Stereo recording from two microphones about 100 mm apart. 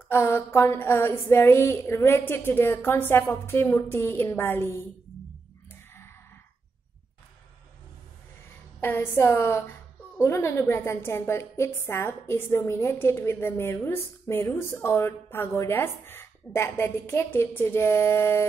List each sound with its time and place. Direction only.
0.1 s a woman's voice: 25° left (ahead or behind)
5.7 s a sound: 25° left (ahead or behind)
8.8 s a woman's voice: 20° left (ahead or behind)